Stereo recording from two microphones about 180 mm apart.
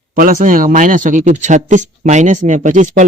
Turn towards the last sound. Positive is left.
turn(degrees=-45)  # may be behind; listen again after turning